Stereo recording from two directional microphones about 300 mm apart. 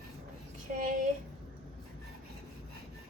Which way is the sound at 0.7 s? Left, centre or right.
Right.